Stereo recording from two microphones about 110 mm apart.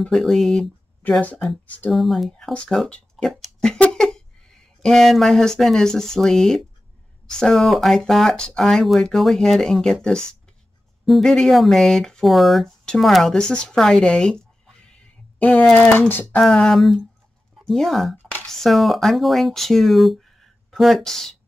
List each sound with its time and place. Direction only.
0.0 s speech: centre (ahead or behind)
1.2 s speech: 15° left (ahead or behind)
1.9 s speech: centre (ahead or behind)
11.1 s speech: centre (ahead or behind)
15.3 s a sound: 15° left (ahead or behind)
15.7 s speech: 15° left (ahead or behind)
16.4 s speech: 5° left (ahead or behind)